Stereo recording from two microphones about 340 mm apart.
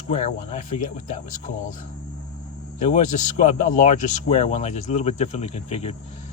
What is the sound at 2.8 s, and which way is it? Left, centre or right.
A man's voice, centre.